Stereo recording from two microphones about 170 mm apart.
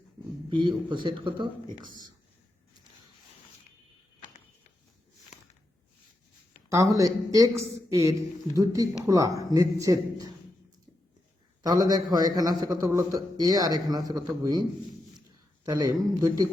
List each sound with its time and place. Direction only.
0.5 s a man's voice: 25° right (ahead or behind)
6.7 s a man's voice: 20° right (ahead or behind)
11.6 s a man's voice: 20° right (ahead or behind)
15.6 s a man's voice: 20° right (ahead or behind)